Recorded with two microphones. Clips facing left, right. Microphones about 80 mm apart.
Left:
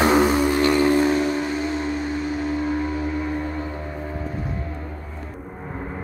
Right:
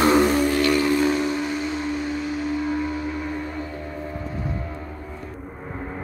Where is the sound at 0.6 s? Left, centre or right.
Left.